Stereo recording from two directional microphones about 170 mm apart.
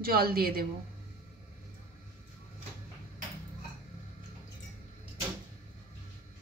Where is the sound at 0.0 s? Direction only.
60° right (ahead or behind).